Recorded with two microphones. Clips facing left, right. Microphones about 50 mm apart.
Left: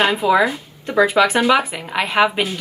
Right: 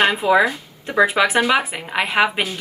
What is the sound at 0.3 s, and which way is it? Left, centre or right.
A woman's voice, centre.